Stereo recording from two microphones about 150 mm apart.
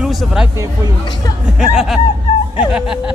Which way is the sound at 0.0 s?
Centre (ahead or behind).